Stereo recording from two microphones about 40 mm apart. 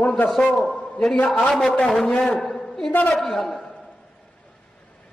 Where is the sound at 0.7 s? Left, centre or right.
Centre.